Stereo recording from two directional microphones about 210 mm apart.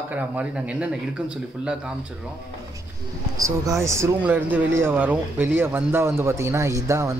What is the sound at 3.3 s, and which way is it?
Speech, 15° right (ahead or behind).